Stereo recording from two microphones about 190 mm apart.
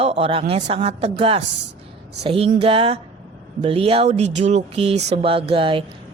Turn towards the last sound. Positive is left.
turn(degrees=-30)  # may be behind; listen again after turning